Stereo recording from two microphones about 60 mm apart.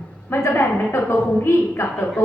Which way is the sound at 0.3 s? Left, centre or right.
Left.